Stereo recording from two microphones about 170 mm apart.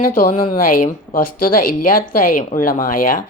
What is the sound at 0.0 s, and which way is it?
Speech, 55° left (ahead or behind).